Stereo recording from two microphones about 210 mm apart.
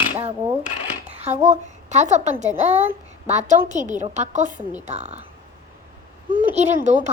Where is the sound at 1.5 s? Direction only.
35° right (ahead or behind).